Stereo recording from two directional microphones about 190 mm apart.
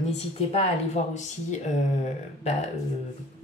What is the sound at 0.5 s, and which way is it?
Speech, 35° left (ahead or behind).